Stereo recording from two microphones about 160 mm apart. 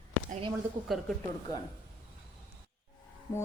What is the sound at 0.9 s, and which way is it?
Speech, centre (ahead or behind).